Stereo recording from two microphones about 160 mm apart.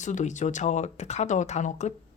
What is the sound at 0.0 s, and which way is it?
Speech, 50° left (ahead or behind).